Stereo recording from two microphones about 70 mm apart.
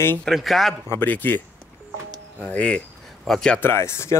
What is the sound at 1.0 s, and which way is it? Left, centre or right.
Speech, left.